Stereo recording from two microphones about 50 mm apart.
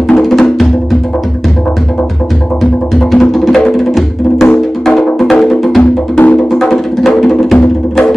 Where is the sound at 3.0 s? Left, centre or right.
Centre.